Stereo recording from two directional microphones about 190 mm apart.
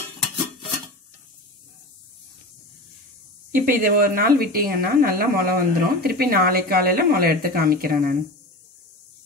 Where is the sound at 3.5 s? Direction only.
50° right (ahead or behind).